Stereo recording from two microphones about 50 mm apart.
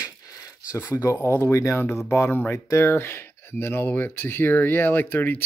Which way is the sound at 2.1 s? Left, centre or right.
Left.